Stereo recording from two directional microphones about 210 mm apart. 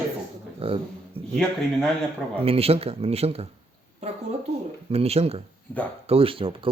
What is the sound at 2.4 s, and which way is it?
Speech, 30° right (ahead or behind).